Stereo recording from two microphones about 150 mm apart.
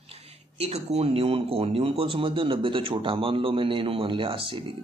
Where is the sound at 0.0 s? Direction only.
45° right (ahead or behind).